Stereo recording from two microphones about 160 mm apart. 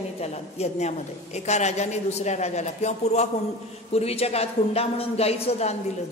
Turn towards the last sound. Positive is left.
turn(degrees=40)  # may be behind; listen again after turning